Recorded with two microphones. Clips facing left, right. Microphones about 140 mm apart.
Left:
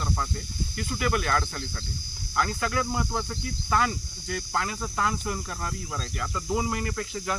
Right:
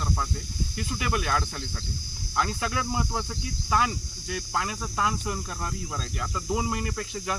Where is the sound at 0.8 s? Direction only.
15° right (ahead or behind).